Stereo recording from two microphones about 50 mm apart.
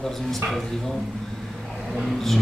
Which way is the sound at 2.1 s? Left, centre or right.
Centre.